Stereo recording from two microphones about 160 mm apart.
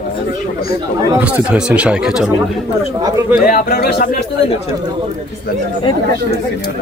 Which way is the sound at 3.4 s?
70° left (ahead or behind).